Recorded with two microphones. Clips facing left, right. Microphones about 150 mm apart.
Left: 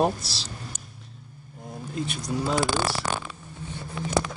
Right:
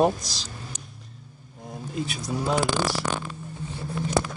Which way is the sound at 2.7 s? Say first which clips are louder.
Right 1 dB; 10° left (ahead or behind).